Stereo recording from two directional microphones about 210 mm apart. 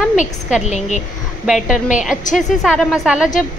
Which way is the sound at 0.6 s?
35° left (ahead or behind).